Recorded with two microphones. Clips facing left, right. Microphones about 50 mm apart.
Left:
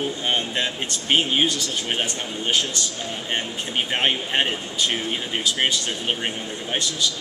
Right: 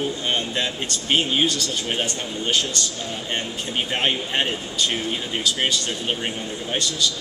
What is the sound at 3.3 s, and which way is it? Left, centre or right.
Speech, left.